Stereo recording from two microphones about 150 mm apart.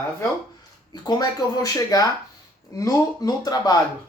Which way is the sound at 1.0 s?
25° left (ahead or behind).